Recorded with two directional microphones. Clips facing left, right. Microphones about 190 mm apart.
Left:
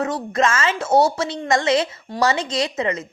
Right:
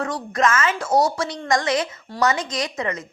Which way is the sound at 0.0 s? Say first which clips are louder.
Left 2 dB; 25° left (ahead or behind).